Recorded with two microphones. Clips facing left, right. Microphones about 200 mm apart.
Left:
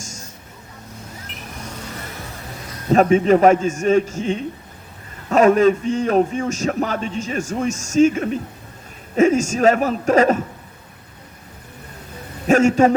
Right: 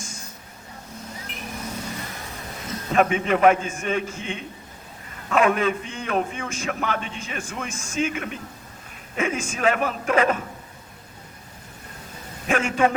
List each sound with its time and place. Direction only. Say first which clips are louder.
0.0 s vehicle: left 2 dB; 45° left (ahead or behind)
2.9 s a man's voice: left 7 dB; 40° left (ahead or behind)
12.5 s a man's voice: left 8 dB; 40° left (ahead or behind)